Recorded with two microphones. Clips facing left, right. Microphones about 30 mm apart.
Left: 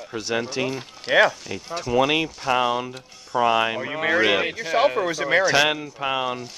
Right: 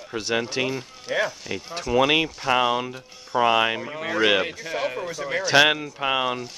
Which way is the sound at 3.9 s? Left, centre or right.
Left.